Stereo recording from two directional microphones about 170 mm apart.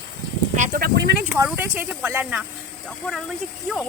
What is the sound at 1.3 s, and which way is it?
Speech, 15° right (ahead or behind).